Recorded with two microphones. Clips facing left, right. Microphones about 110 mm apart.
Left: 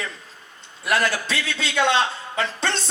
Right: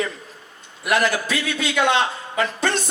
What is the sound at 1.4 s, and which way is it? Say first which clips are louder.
A man's voice: right 1 dB; 25° left (ahead or behind).